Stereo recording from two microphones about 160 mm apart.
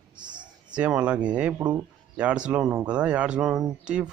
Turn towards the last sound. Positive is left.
turn(degrees=-5)  # may be behind; listen again after turning